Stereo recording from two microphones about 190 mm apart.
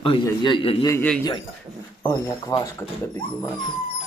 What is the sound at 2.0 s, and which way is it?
Speech, 20° left (ahead or behind).